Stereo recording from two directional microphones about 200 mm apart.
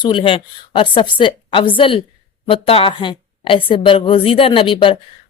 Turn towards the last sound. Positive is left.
turn(degrees=25)  # may be behind; listen again after turning